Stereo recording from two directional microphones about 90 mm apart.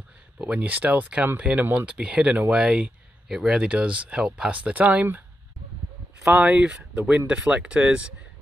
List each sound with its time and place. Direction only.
0.4 s speech: 15° right (ahead or behind)
6.4 s speech: 15° right (ahead or behind)